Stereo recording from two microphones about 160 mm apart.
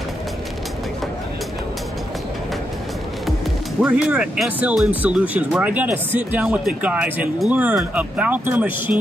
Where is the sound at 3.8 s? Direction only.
5° right (ahead or behind).